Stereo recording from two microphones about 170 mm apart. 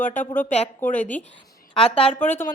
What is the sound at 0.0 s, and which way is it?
Speech, 50° left (ahead or behind).